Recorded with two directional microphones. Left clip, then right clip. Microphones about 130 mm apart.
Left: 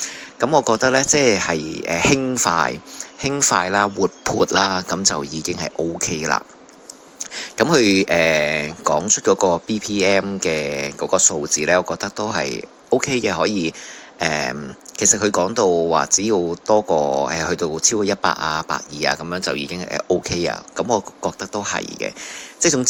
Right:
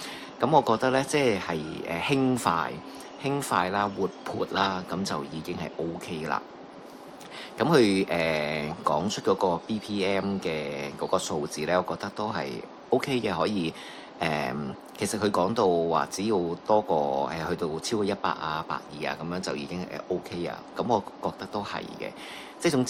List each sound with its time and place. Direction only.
0.3 s speech: 30° left (ahead or behind)
2.5 s speech: 50° left (ahead or behind)
4.4 s speech: 55° left (ahead or behind)
19.3 s speech: 35° left (ahead or behind)
20.7 s speech: 30° left (ahead or behind)